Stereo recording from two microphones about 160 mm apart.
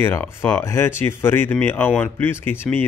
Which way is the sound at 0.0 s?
15° left (ahead or behind).